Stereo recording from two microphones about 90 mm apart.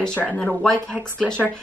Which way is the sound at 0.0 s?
15° left (ahead or behind).